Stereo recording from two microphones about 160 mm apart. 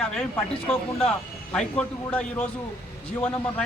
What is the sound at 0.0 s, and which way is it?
A man's voice, 5° left (ahead or behind).